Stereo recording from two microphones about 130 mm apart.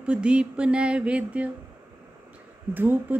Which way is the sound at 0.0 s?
10° right (ahead or behind).